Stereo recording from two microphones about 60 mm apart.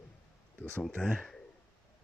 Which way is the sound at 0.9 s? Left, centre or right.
Centre.